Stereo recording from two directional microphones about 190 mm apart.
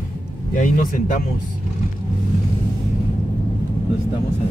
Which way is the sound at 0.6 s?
40° left (ahead or behind).